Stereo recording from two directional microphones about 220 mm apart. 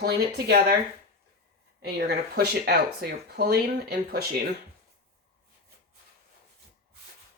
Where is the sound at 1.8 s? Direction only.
45° right (ahead or behind).